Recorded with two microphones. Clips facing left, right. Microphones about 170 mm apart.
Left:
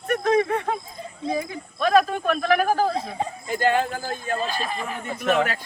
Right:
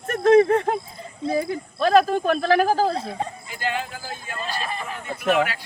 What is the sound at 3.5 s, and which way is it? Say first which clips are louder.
Speech: left 12 dB; 45° left (ahead or behind).